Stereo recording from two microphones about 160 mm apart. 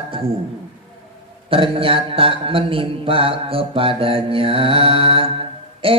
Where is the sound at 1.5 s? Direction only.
35° right (ahead or behind).